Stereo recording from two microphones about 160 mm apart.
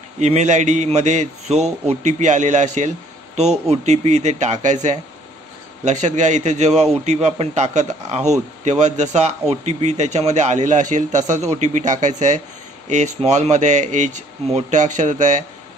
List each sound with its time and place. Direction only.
0.2 s a man's voice: 45° right (ahead or behind)